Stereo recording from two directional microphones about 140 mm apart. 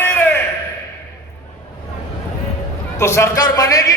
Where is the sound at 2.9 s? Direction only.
20° left (ahead or behind).